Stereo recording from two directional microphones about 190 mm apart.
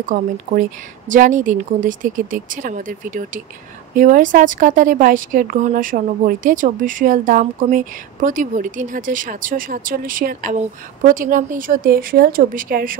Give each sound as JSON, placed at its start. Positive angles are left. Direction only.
{"t": 0.1, "sound": "speech", "side_deg": -45}